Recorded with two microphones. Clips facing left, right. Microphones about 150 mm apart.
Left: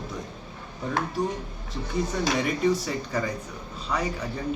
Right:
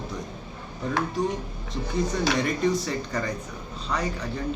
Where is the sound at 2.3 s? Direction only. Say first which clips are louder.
Left 3 dB; 5° left (ahead or behind).